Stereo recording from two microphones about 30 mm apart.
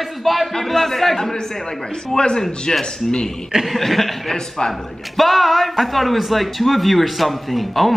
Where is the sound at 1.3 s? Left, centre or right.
Left.